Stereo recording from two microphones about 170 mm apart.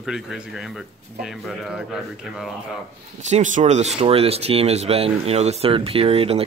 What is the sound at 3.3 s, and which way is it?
Speech, 45° right (ahead or behind).